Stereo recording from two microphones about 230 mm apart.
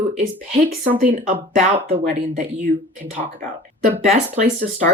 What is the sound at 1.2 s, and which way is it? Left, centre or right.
Speech, right.